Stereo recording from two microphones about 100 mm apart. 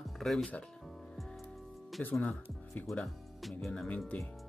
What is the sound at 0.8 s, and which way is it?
Music, centre (ahead or behind).